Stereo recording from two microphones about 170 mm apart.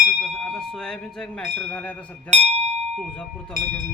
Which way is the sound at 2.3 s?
40° right (ahead or behind).